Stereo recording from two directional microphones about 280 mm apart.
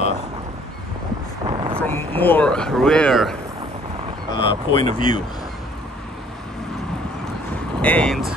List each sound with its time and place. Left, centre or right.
1.5 s vehicle: centre
1.8 s speech: centre
4.4 s speech: centre
7.8 s speech: centre